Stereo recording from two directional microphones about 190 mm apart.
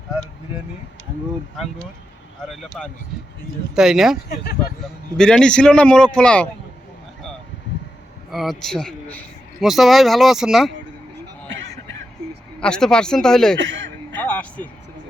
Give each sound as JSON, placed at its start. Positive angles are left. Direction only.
{"t": 2.5, "sound": "speech", "side_deg": 0}
{"t": 8.3, "sound": "speech", "side_deg": 0}
{"t": 12.5, "sound": "speech", "side_deg": 5}
{"t": 13.6, "sound": "a sound", "side_deg": -75}
{"t": 14.2, "sound": "music", "side_deg": 5}